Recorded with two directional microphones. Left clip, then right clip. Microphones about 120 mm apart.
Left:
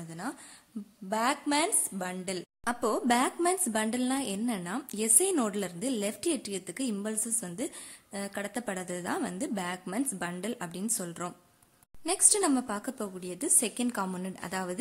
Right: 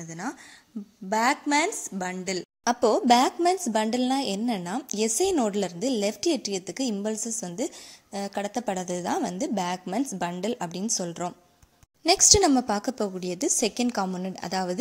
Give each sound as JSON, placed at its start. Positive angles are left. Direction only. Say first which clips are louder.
{"t": 0.1, "sound": "a woman's voice", "louder": "right 4 dB", "side_deg": -25}
{"t": 2.6, "sound": "a woman's voice", "louder": "right 8 dB", "side_deg": -35}
{"t": 12.1, "sound": "a woman's voice", "louder": "right 9 dB", "side_deg": -50}
{"t": 14.0, "sound": "a woman's voice", "louder": "right 5 dB", "side_deg": -20}